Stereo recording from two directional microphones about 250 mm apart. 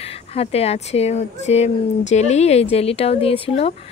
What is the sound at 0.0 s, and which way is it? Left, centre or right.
A woman's voice, left.